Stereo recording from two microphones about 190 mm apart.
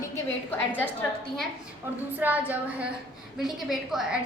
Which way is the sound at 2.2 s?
10° right (ahead or behind).